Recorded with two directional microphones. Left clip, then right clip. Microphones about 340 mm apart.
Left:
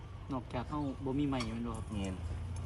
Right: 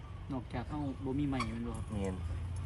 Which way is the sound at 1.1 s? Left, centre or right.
Centre.